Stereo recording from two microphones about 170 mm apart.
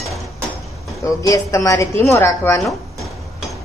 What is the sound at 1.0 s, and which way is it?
A woman's voice, 20° left (ahead or behind).